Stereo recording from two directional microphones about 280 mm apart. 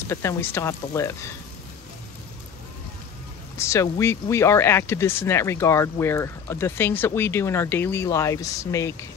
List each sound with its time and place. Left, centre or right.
0.1 s speech: centre
3.5 s speech: centre